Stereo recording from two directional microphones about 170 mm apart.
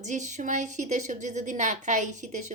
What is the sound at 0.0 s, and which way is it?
A woman's voice, 45° right (ahead or behind).